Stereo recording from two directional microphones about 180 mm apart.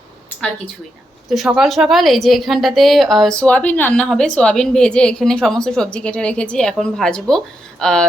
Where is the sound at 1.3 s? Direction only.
Centre (ahead or behind).